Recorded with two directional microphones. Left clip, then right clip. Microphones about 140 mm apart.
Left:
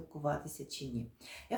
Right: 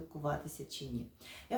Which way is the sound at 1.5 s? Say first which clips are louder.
Even; 25° left (ahead or behind).